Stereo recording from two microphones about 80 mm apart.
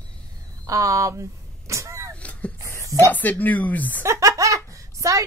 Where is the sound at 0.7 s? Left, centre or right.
Right.